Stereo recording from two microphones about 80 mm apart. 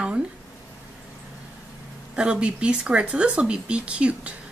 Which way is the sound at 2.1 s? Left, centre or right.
Centre.